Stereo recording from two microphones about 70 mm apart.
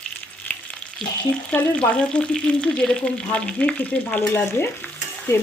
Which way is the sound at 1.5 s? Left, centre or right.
Centre.